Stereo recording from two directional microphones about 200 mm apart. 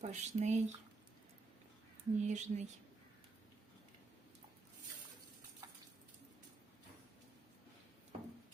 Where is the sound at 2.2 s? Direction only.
35° right (ahead or behind).